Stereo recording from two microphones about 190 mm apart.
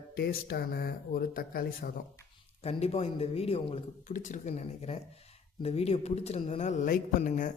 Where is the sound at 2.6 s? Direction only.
35° left (ahead or behind).